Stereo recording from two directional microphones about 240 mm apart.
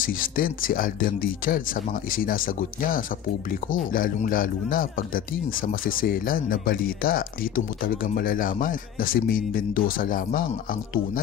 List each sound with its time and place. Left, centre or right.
0.0 s speech: left